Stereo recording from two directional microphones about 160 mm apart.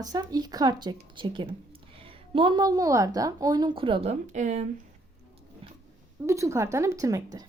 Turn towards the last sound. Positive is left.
turn(degrees=-20)  # may be behind; listen again after turning